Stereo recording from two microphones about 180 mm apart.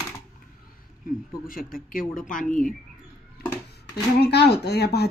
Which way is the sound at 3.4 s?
60° left (ahead or behind).